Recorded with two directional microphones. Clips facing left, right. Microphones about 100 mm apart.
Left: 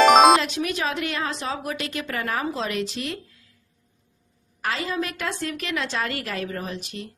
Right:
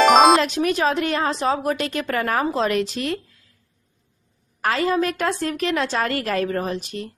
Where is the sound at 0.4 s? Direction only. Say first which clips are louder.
Right 6 dB; 45° right (ahead or behind).